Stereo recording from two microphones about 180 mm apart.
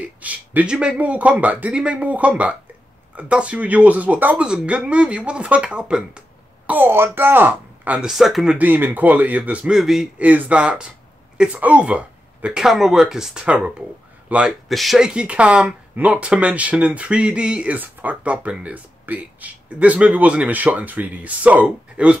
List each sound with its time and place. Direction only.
0.2 s speech: 10° right (ahead or behind)